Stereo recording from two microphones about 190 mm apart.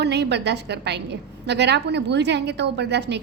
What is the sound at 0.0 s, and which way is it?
A woman's voice, 65° right (ahead or behind).